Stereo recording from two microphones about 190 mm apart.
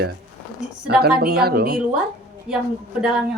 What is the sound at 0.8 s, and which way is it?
Speech, 55° right (ahead or behind).